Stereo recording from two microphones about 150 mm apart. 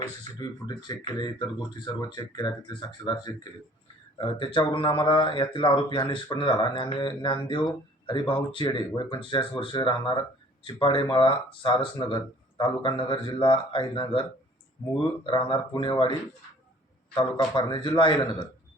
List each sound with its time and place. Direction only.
0.3 s speech: 30° left (ahead or behind)
15.3 s speech: 35° left (ahead or behind)
17.2 s speech: 35° left (ahead or behind)